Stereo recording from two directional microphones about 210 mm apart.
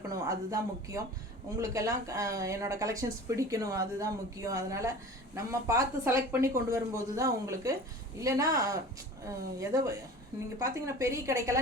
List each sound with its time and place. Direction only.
0.1 s speech: 15° right (ahead or behind)